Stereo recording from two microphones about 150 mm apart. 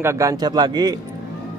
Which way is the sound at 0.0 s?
20° right (ahead or behind).